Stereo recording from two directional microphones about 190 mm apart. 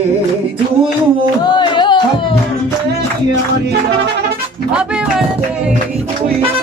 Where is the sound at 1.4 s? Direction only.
25° left (ahead or behind).